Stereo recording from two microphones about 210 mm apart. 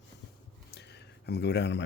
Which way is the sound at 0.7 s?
55° left (ahead or behind).